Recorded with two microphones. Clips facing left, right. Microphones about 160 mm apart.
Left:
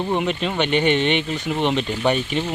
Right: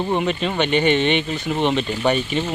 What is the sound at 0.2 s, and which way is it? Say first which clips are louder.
Speech: right 1 dB; 10° left (ahead or behind).